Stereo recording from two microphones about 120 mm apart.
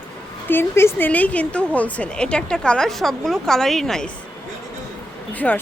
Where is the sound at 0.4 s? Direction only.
20° left (ahead or behind); by 4.0 s 5° left (ahead or behind).